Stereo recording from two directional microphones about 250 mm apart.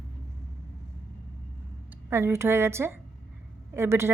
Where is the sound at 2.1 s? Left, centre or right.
Centre.